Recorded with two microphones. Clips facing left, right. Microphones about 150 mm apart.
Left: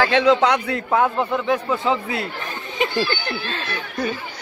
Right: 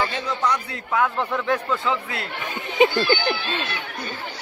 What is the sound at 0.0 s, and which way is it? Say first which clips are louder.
Speech: left 9 dB; 90° left.